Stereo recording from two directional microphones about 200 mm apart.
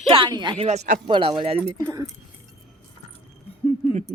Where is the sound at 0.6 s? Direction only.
35° right (ahead or behind).